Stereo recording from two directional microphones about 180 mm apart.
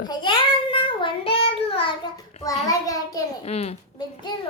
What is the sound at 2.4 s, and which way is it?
Speech, 20° left (ahead or behind).